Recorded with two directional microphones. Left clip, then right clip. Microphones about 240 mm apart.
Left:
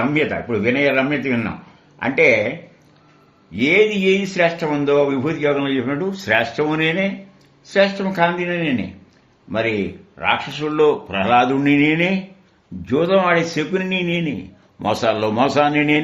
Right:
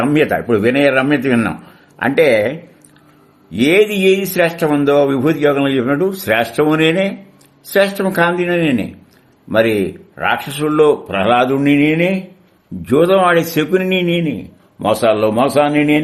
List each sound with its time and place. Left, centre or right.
0.1 s speech: right
3.5 s speech: right; by 12.1 s centre
12.8 s a man's voice: right